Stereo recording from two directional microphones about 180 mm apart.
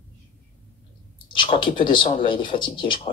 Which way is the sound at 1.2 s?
25° left (ahead or behind).